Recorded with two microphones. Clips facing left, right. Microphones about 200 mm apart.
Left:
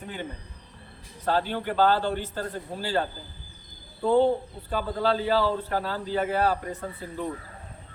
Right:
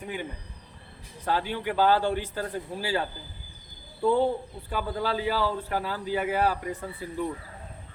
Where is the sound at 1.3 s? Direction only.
10° right (ahead or behind).